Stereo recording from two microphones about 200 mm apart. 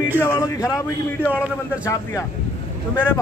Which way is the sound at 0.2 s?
15° left (ahead or behind).